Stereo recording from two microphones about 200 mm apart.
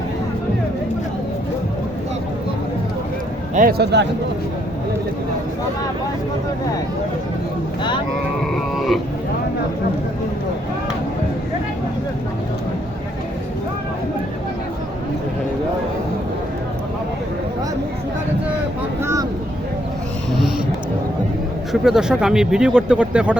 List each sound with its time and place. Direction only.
3.5 s speech: 45° right (ahead or behind)
8.5 s a sound: centre (ahead or behind)
21.7 s speech: centre (ahead or behind)